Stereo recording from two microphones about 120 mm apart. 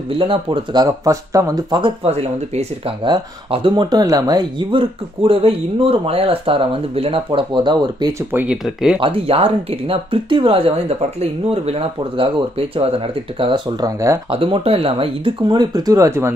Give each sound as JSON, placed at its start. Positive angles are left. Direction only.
{"t": 0.2, "sound": "speech", "side_deg": -50}
{"t": 0.7, "sound": "speech", "side_deg": -25}
{"t": 2.0, "sound": "speech", "side_deg": -60}
{"t": 3.0, "sound": "speech", "side_deg": -45}
{"t": 8.3, "sound": "speech", "side_deg": -15}
{"t": 8.6, "sound": "speech", "side_deg": -5}
{"t": 9.0, "sound": "speech", "side_deg": -50}
{"t": 14.3, "sound": "speech", "side_deg": -50}
{"t": 15.4, "sound": "speech", "side_deg": -35}